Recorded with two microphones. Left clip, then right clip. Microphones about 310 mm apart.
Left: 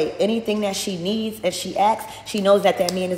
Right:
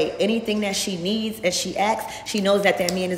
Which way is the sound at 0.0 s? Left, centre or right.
Centre.